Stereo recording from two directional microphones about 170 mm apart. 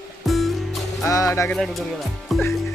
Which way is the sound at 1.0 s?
20° left (ahead or behind).